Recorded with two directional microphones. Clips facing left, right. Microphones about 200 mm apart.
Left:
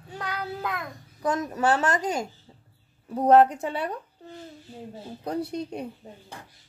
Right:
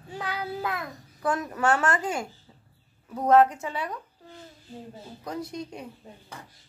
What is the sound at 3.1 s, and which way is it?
Speech, 30° left (ahead or behind).